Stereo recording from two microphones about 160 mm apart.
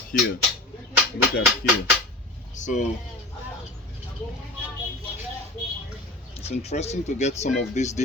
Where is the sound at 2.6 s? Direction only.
50° left (ahead or behind).